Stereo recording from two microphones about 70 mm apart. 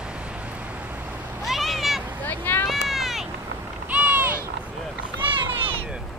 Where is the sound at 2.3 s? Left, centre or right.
Left.